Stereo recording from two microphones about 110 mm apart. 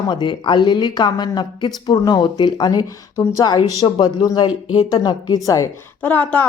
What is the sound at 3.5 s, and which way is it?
Speech, 40° left (ahead or behind).